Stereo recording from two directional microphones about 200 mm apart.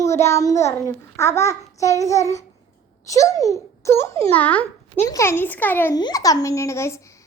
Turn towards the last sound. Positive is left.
turn(degrees=15)  # may be behind; listen again after turning